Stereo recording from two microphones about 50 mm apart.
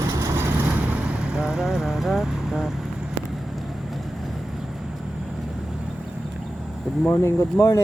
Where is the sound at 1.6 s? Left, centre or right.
Centre.